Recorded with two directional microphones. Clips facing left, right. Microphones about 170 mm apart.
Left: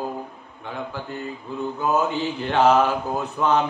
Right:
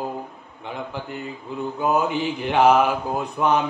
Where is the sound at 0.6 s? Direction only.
20° right (ahead or behind).